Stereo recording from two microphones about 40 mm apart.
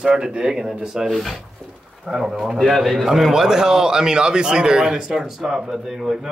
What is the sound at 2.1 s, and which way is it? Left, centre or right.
A man's voice, centre.